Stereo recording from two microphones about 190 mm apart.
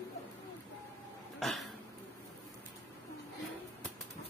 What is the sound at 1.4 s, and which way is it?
Speech, centre (ahead or behind).